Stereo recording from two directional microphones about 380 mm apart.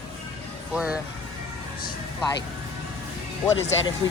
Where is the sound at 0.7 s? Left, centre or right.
Centre.